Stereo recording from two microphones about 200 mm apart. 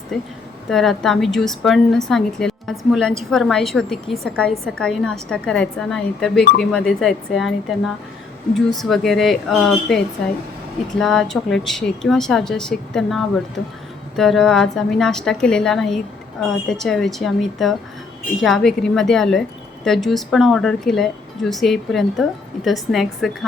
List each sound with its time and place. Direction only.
0.1 s a woman's voice: centre (ahead or behind)